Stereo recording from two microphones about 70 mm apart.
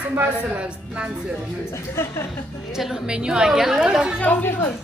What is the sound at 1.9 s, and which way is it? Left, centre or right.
Speech, left.